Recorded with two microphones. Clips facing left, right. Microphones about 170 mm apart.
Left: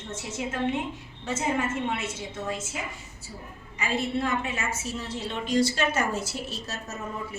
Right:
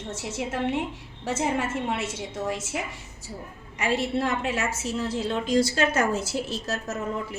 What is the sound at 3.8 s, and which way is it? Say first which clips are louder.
A woman's voice: right 3 dB; 85° right.